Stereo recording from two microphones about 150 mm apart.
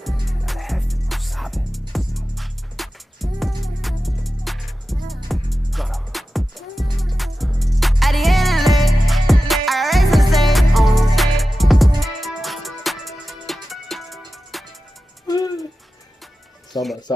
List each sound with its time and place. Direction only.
0.0 s music: centre (ahead or behind)
15.2 s music: 25° left (ahead or behind)
16.7 s music: 30° left (ahead or behind)